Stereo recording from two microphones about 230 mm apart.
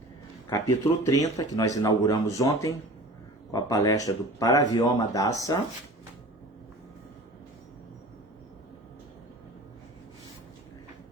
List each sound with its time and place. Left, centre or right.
0.4 s speech: centre